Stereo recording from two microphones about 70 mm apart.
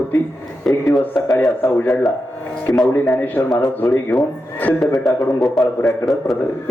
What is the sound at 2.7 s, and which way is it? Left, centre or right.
Speech, left.